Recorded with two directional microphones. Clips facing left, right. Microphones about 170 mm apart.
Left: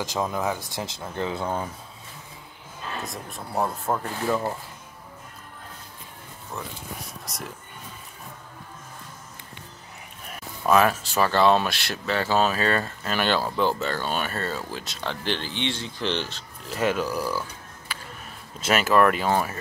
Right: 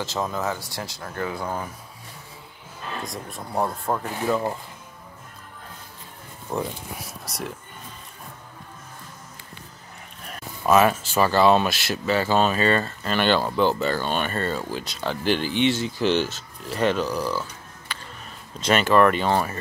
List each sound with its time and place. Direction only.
0.0 s speech: 15° left (ahead or behind)
3.1 s speech: centre (ahead or behind)
6.5 s speech: 35° right (ahead or behind)
7.1 s speech: centre (ahead or behind)
10.6 s speech: 5° right (ahead or behind)